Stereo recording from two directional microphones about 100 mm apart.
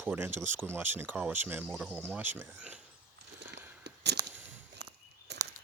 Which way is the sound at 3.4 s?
20° right (ahead or behind).